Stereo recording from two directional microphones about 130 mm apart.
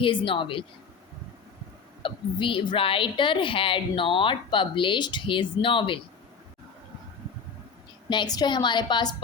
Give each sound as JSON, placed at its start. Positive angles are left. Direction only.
{"t": 0.0, "sound": "a woman's voice", "side_deg": 40}
{"t": 2.0, "sound": "a woman's voice", "side_deg": 40}
{"t": 8.1, "sound": "a woman's voice", "side_deg": 30}